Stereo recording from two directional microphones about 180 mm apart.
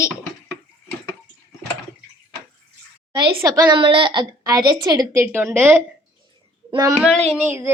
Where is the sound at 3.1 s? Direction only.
25° right (ahead or behind).